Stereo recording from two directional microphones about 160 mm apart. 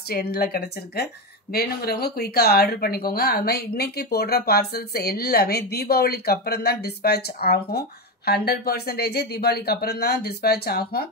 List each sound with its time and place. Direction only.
0.1 s speech: 75° left (ahead or behind)